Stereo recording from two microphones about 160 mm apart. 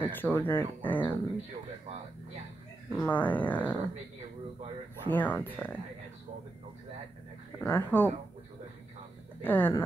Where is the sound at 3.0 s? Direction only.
10° left (ahead or behind).